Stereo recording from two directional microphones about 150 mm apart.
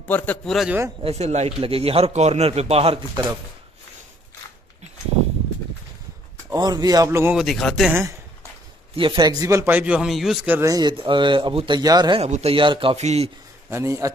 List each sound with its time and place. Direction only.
0.1 s a man's voice: 10° left (ahead or behind)
1.0 s a man's voice: 45° right (ahead or behind)
6.5 s speech: 25° right (ahead or behind)
7.3 s speech: centre (ahead or behind)
7.9 s a man's voice: 20° right (ahead or behind)
8.9 s a man's voice: 35° right (ahead or behind); by 10.7 s 10° right (ahead or behind)
10.7 s speech: 30° right (ahead or behind)
12.2 s speech: 45° right (ahead or behind)
12.9 s a man's voice: 45° right (ahead or behind)
13.7 s speech: 20° right (ahead or behind)